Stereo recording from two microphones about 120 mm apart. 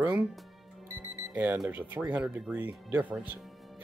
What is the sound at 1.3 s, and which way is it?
Speech, 15° right (ahead or behind).